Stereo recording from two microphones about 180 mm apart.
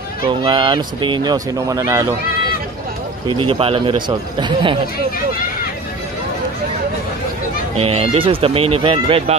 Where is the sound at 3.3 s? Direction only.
30° right (ahead or behind).